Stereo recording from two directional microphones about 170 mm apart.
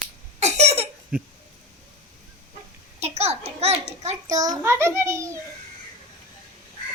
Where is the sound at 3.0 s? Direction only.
40° right (ahead or behind).